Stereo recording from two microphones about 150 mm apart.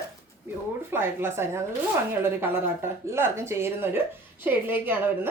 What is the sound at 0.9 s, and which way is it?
A woman's voice, 15° right (ahead or behind).